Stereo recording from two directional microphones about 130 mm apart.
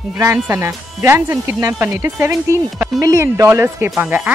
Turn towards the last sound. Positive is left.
turn(degrees=-10)  # may be behind; listen again after turning